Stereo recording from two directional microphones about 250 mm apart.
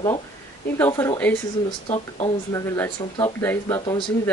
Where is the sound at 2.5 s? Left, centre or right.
Centre.